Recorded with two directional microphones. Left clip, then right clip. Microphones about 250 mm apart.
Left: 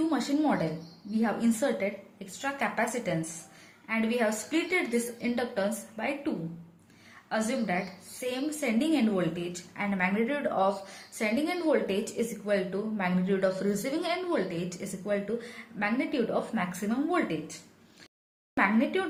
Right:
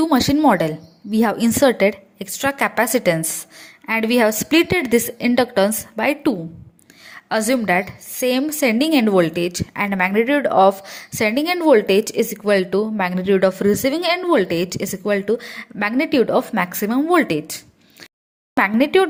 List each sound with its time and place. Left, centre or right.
0.1 s a woman's voice: right
18.5 s a woman's voice: right